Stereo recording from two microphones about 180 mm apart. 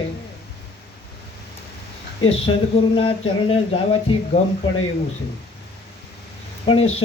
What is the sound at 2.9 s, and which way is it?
Speech, 30° left (ahead or behind).